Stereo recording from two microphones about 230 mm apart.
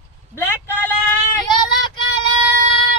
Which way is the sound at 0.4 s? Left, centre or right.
Centre.